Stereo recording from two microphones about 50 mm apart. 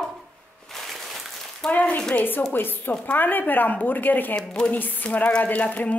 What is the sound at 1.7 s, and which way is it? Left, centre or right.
Speech, left.